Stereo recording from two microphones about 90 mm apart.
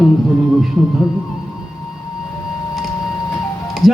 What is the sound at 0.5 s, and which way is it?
Speech, 5° right (ahead or behind).